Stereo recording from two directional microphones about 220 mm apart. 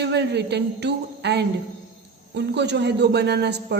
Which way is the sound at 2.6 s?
50° right (ahead or behind).